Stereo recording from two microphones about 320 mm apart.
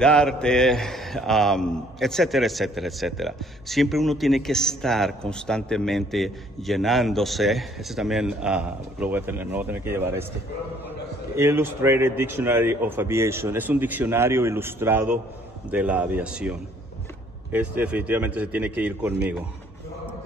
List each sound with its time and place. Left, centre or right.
0.0 s a man's voice: centre
11.3 s a man's voice: centre